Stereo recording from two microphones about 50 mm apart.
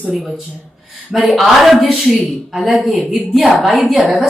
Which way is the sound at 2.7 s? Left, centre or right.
Centre.